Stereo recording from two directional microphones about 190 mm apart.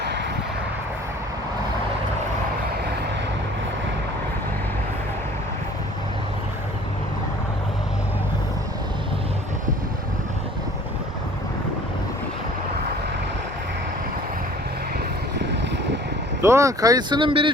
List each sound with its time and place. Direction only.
0.0 s vehicle: 65° right (ahead or behind)
16.4 s speech: 15° right (ahead or behind)